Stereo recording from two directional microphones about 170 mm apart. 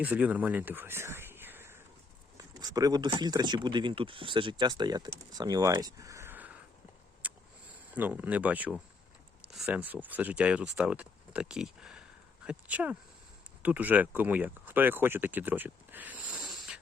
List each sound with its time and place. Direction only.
0.0 s speech: 10° right (ahead or behind)
7.9 s speech: 10° right (ahead or behind)